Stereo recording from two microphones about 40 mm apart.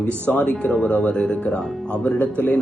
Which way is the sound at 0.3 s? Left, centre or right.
Left.